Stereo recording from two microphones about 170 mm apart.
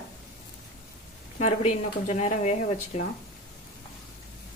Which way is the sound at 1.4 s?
40° left (ahead or behind).